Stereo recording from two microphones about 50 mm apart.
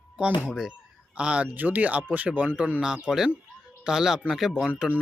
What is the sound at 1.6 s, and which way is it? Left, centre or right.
Speech, right.